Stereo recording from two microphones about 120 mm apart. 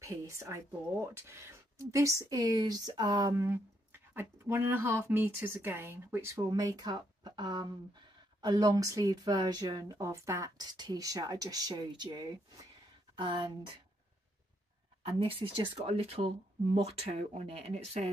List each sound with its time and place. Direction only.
0.0 s speech: 25° right (ahead or behind)
3.4 s speech: 20° right (ahead or behind); by 13.6 s 40° right (ahead or behind)
15.0 s speech: 50° right (ahead or behind)